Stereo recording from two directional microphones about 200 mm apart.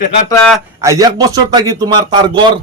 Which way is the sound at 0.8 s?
15° right (ahead or behind).